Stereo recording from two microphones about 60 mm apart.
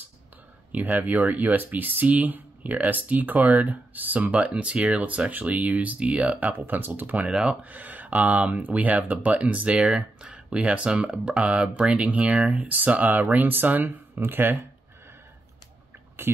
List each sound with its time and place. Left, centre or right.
0.7 s speech: right